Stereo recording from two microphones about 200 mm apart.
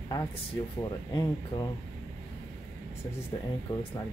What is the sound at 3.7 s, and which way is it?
Speech, 20° left (ahead or behind).